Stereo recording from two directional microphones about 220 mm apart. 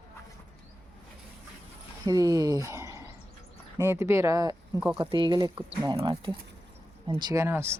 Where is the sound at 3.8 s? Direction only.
10° right (ahead or behind).